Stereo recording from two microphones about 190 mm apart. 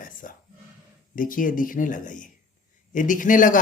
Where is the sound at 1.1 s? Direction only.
45° left (ahead or behind).